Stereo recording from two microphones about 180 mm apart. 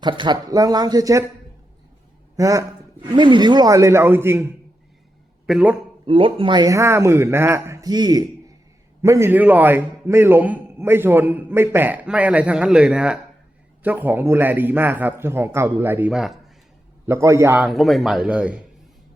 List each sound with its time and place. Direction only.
0.0 s speech: 25° right (ahead or behind)
2.3 s a man's voice: 15° right (ahead or behind)
6.1 s a man's voice: 30° right (ahead or behind); by 16.4 s centre (ahead or behind)
17.1 s a man's voice: 15° right (ahead or behind)
17.7 s speech: centre (ahead or behind)